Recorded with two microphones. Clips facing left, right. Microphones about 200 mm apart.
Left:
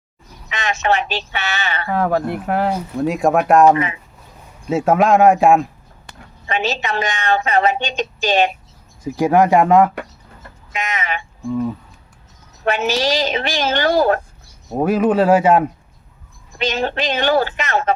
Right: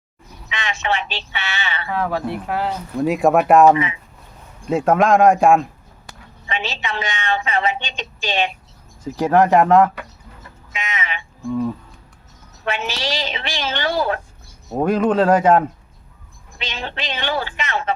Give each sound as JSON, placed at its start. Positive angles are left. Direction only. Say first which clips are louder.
{"t": 0.5, "sound": "a woman's voice", "louder": "left 4 dB", "side_deg": 45}
{"t": 3.0, "sound": "speech", "louder": "right 1 dB", "side_deg": 0}
{"t": 6.5, "sound": "a woman's voice", "louder": "left 5 dB", "side_deg": 45}
{"t": 9.0, "sound": "speech", "louder": "left 1 dB", "side_deg": 10}
{"t": 10.7, "sound": "speech", "louder": "left 4 dB", "side_deg": 40}
{"t": 12.6, "sound": "a woman's voice", "louder": "left 6 dB", "side_deg": 45}
{"t": 14.7, "sound": "speech", "louder": "left 1 dB", "side_deg": 5}
{"t": 16.6, "sound": "a woman's voice", "louder": "left 9 dB", "side_deg": 45}